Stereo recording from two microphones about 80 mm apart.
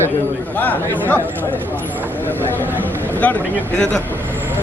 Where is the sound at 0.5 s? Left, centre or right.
Left.